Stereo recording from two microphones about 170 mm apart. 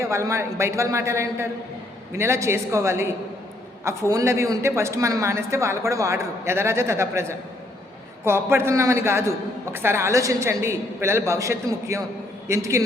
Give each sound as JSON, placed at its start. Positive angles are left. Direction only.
{"t": 0.0, "sound": "a man's voice", "side_deg": -15}